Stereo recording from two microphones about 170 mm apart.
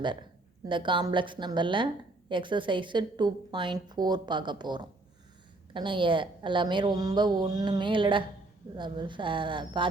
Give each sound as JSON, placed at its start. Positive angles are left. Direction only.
{"t": 0.0, "sound": "a woman's voice", "side_deg": -25}